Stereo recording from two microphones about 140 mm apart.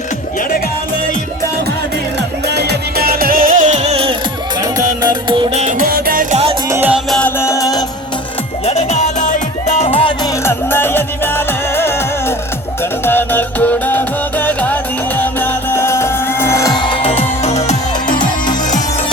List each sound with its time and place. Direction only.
3.0 s music: 90° right; by 4.1 s 45° right (ahead or behind)
4.6 s music: 30° right (ahead or behind)
5.5 s music: 65° right (ahead or behind); by 6.2 s 90° right
6.3 s music: 45° right (ahead or behind)
6.7 s music: 15° right (ahead or behind)
7.2 s music: 15° left (ahead or behind)
8.6 s music: 55° left (ahead or behind)
10.4 s music: 15° left (ahead or behind)
13.1 s music: 15° left (ahead or behind)
16.9 s music: 40° left (ahead or behind)
17.4 s music: 55° left (ahead or behind)
18.1 s music: 35° left (ahead or behind)